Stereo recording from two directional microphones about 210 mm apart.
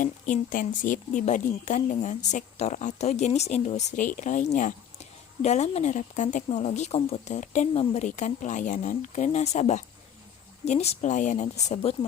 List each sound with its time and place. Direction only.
0.0 s a woman's voice: 40° left (ahead or behind)